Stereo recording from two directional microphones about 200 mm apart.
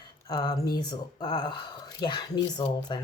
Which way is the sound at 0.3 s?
20° left (ahead or behind).